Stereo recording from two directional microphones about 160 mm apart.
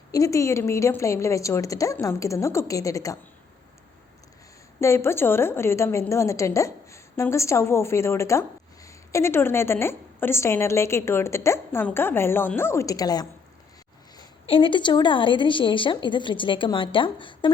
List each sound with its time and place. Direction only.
0.1 s a woman's voice: 20° left (ahead or behind)
4.8 s a woman's voice: 15° left (ahead or behind)
14.4 s a woman's voice: 35° left (ahead or behind)